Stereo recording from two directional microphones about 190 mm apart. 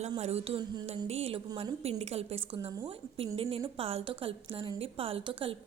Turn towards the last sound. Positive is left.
turn(degrees=-30)  # may be behind; listen again after turning